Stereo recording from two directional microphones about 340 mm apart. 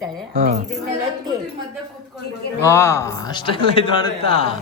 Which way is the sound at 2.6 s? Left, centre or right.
Centre.